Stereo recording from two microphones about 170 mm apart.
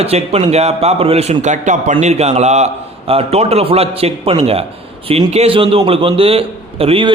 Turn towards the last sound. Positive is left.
turn(degrees=-35)  # may be behind; listen again after turning